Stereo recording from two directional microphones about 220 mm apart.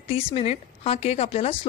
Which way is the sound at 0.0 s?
25° left (ahead or behind).